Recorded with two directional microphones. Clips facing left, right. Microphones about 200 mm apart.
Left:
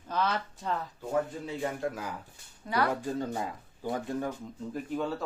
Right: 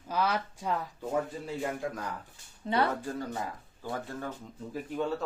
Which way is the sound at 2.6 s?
25° right (ahead or behind).